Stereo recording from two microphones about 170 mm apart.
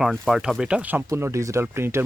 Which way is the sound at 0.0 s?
Centre (ahead or behind).